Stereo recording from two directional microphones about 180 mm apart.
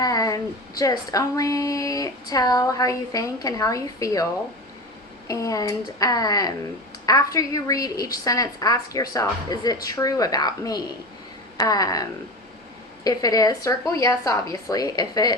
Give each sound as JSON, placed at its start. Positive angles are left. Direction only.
{"t": 0.0, "sound": "a woman's voice", "side_deg": 20}
{"t": 5.3, "sound": "a woman's voice", "side_deg": 20}
{"t": 13.1, "sound": "a woman's voice", "side_deg": 20}